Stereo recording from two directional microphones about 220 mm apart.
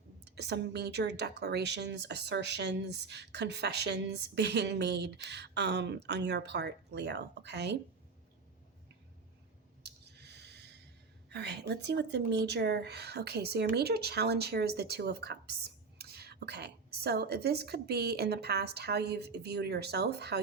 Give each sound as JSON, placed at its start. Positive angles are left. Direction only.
{"t": 0.3, "sound": "a woman's voice", "side_deg": -50}
{"t": 9.8, "sound": "a sound", "side_deg": -50}
{"t": 11.3, "sound": "a woman's voice", "side_deg": -50}